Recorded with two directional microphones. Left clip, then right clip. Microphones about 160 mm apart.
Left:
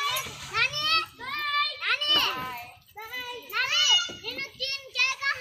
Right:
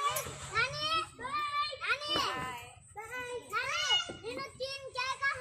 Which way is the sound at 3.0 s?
55° left (ahead or behind).